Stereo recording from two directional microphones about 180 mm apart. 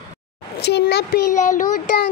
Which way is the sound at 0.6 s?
65° left (ahead or behind).